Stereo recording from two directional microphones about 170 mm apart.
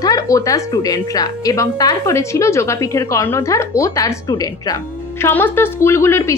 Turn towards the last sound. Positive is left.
turn(degrees=15)  # may be behind; listen again after turning